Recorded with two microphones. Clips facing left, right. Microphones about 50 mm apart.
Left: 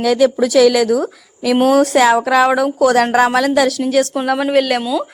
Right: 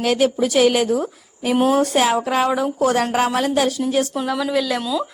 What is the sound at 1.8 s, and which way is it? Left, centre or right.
Speech, left.